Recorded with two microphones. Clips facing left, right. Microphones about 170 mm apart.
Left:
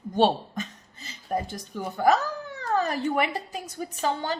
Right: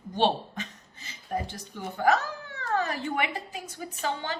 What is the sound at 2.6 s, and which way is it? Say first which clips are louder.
A woman's voice: left 3 dB; 40° left (ahead or behind).